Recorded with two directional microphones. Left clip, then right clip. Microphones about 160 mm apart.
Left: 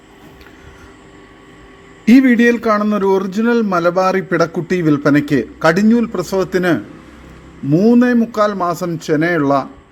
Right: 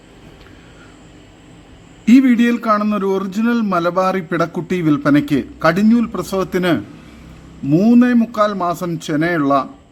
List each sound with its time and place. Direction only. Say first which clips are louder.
2.0 s a man's voice: left 2 dB; 5° left (ahead or behind)